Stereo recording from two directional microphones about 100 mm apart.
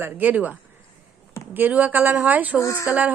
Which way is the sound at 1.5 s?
15° right (ahead or behind).